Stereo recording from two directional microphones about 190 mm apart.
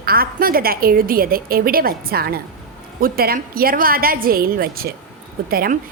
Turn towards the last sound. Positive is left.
turn(degrees=-50)  # may be behind; listen again after turning